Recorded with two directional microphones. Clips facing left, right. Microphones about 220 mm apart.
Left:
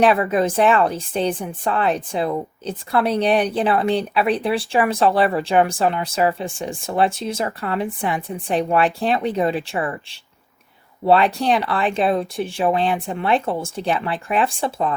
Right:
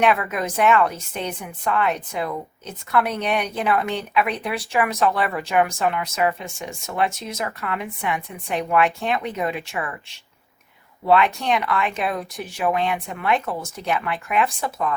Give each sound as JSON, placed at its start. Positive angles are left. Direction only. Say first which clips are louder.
{"t": 0.0, "sound": "speech", "louder": "left 5 dB", "side_deg": 30}